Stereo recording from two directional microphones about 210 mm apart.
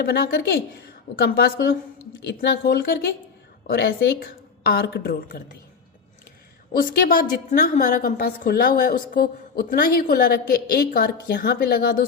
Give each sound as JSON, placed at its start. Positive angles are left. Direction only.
{"t": 0.0, "sound": "a woman's voice", "side_deg": 45}
{"t": 6.7, "sound": "a woman's voice", "side_deg": 40}